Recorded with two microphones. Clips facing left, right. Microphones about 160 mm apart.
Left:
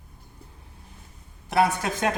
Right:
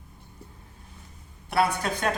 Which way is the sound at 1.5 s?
20° left (ahead or behind).